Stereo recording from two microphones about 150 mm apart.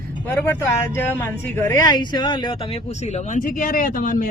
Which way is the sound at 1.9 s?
30° left (ahead or behind).